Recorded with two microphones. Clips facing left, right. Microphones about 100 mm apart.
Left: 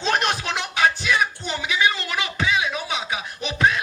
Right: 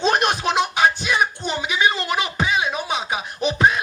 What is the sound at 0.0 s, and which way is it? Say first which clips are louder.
Music: right 4 dB; 20° right (ahead or behind).